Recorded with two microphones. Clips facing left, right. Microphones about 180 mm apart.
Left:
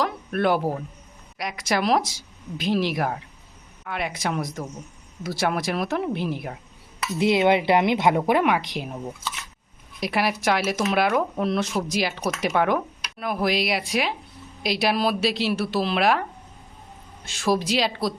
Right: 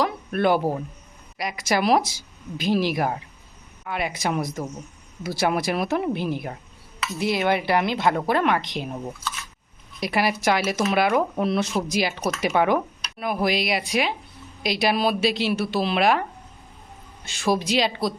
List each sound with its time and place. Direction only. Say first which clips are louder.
0.0 s a sound: right 1 dB; centre (ahead or behind)
1.4 s speech: right 1 dB; centre (ahead or behind)
7.0 s speech: left 4 dB; 20° left (ahead or behind); by 16.2 s centre (ahead or behind)
17.2 s speech: even; centre (ahead or behind)